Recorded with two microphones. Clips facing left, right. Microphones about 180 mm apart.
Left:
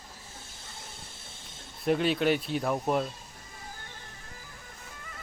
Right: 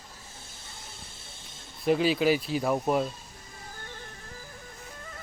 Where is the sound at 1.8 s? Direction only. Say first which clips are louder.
Right 2 dB; centre (ahead or behind).